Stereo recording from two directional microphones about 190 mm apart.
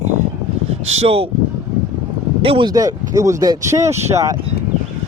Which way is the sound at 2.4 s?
25° right (ahead or behind).